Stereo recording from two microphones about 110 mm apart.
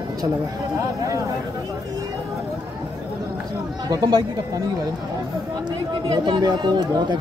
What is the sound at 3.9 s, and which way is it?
Speech, 40° right (ahead or behind).